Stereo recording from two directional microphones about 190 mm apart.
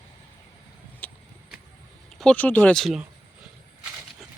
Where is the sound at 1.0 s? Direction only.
10° left (ahead or behind).